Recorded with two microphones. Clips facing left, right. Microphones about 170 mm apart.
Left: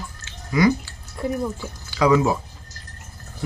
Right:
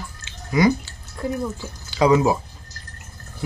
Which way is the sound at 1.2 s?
10° left (ahead or behind).